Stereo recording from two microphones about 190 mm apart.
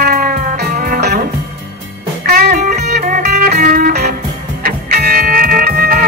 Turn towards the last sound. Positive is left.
turn(degrees=-50)  # may be behind; listen again after turning